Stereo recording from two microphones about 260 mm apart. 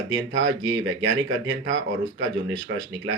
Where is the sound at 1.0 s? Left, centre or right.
Right.